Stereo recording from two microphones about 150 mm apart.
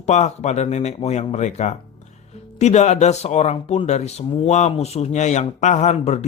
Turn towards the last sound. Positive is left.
turn(degrees=50)  # may be behind; listen again after turning